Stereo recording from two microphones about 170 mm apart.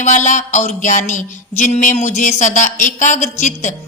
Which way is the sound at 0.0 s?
45° left (ahead or behind).